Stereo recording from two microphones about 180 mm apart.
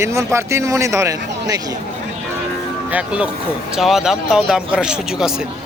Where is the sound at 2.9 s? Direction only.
5° right (ahead or behind).